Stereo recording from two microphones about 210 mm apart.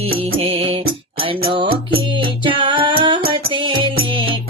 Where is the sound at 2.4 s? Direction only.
25° right (ahead or behind).